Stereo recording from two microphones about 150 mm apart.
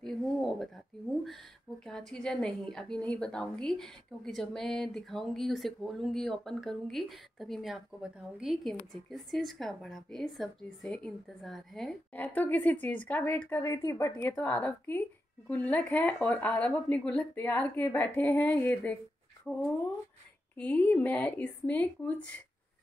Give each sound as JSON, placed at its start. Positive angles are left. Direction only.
{"t": 0.0, "sound": "a sound", "side_deg": 0}
{"t": 1.9, "sound": "a woman's voice", "side_deg": 5}
{"t": 13.6, "sound": "speech", "side_deg": 20}
{"t": 14.1, "sound": "speech", "side_deg": 10}
{"t": 19.5, "sound": "a woman's voice", "side_deg": 0}